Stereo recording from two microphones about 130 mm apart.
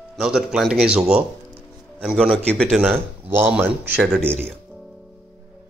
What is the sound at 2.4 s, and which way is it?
Speech, 5° left (ahead or behind).